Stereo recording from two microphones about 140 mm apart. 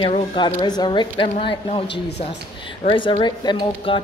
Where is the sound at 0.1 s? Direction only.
40° left (ahead or behind).